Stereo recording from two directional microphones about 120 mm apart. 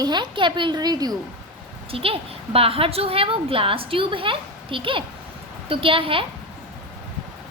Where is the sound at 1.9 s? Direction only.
50° right (ahead or behind).